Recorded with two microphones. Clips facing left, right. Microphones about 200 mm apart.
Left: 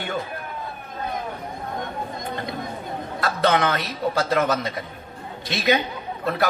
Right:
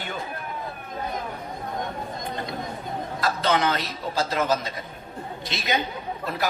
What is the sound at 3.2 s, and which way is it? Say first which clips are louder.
A man's voice: left 3 dB; 60° left (ahead or behind).